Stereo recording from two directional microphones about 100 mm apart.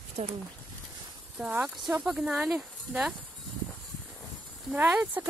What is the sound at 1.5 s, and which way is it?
Speech, 15° right (ahead or behind).